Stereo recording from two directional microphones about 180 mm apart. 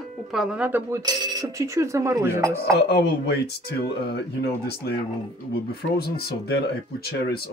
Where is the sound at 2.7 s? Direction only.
65° left (ahead or behind).